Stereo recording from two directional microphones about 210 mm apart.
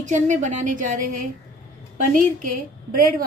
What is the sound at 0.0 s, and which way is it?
A woman's voice, 35° right (ahead or behind).